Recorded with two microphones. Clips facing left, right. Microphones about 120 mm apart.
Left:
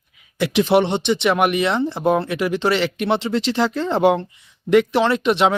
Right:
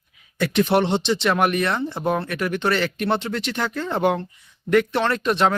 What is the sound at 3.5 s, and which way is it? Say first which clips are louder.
Speech: left 6 dB; 25° left (ahead or behind).